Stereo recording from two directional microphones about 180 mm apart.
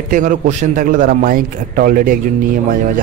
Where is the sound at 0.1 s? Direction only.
45° right (ahead or behind).